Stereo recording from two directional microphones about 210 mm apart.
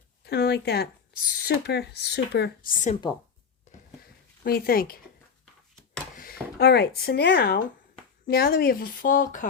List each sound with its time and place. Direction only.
0.3 s speech: 50° left (ahead or behind)
4.4 s speech: 45° left (ahead or behind)
6.1 s speech: 45° left (ahead or behind)